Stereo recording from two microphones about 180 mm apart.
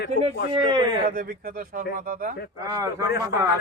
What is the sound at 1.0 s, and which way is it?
Speech, 50° right (ahead or behind).